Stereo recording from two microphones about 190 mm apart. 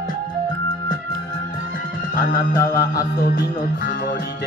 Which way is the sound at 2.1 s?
50° left (ahead or behind).